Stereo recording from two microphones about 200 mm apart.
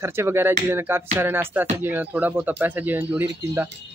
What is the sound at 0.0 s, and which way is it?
Speech, 10° right (ahead or behind).